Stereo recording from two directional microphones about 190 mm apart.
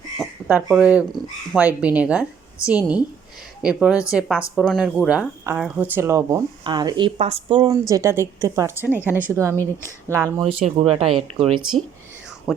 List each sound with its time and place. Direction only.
0.2 s speech: 5° right (ahead or behind)
10.4 s speech: 30° right (ahead or behind)
12.5 s speech: centre (ahead or behind)